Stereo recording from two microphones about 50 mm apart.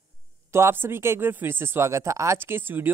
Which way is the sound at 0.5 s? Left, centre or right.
Right.